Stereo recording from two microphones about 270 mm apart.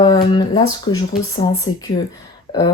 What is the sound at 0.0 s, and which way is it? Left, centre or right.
Speech, centre.